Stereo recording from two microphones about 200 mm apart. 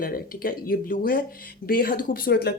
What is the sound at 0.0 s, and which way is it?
A woman's voice, 45° left (ahead or behind).